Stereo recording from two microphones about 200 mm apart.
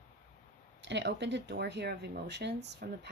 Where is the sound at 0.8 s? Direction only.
60° right (ahead or behind).